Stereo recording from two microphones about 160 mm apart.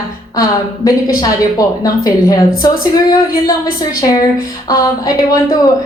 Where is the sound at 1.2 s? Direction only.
25° left (ahead or behind).